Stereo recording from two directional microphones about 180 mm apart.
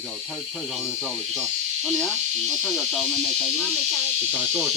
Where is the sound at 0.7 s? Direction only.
Centre (ahead or behind).